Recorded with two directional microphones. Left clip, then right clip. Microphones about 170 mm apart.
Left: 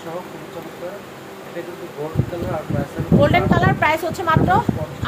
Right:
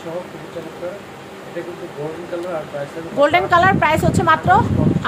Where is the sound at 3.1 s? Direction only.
30° right (ahead or behind).